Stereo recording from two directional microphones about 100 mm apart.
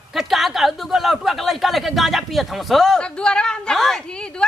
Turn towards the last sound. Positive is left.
turn(degrees=5)  # may be behind; listen again after turning